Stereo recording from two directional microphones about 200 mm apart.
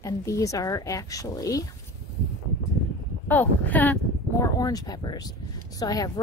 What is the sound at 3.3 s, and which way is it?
Speech, 10° left (ahead or behind).